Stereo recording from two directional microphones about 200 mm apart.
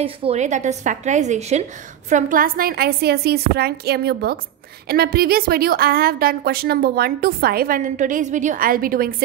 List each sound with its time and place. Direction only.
0.0 s a woman's voice: 30° right (ahead or behind); by 9.1 s 45° right (ahead or behind)